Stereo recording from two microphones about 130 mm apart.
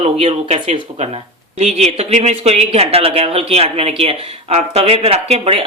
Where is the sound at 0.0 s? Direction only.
60° right (ahead or behind).